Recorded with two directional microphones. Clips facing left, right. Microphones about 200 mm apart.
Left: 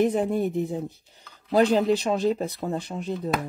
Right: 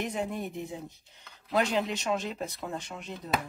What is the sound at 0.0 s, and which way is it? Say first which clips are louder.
Speech: left 10 dB; 35° left (ahead or behind).